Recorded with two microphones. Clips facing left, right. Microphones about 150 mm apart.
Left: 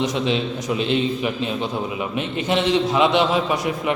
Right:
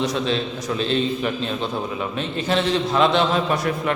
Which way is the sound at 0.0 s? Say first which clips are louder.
Left 1 dB; 15° left (ahead or behind).